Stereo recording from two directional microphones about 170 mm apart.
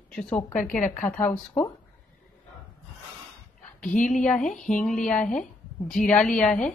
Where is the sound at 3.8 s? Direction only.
50° left (ahead or behind).